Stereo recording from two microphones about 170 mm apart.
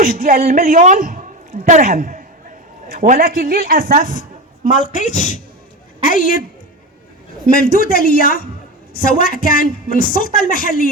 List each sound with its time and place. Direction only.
0.0 s a man's voice: 55° right (ahead or behind)
4.8 s speech: 50° left (ahead or behind)
7.4 s a woman's voice: 55° left (ahead or behind)